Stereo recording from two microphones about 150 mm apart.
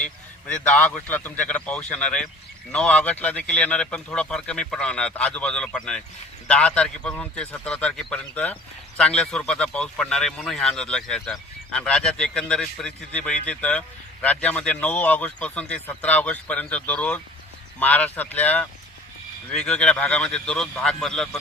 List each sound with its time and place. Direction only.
0.0 s speech: 5° left (ahead or behind)